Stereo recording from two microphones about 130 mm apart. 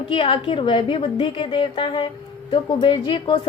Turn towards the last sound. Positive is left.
turn(degrees=40)  # may be behind; listen again after turning